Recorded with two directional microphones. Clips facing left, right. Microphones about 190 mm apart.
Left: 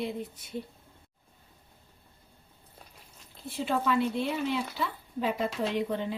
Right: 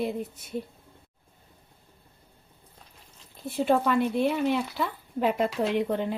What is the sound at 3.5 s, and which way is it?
Speech, 55° right (ahead or behind).